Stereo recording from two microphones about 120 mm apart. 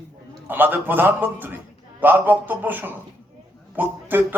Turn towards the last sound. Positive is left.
turn(degrees=-15)  # may be behind; listen again after turning